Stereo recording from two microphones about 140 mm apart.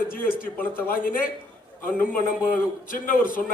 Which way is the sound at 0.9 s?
85° left.